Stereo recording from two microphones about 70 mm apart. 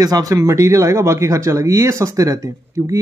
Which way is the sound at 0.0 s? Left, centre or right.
Right.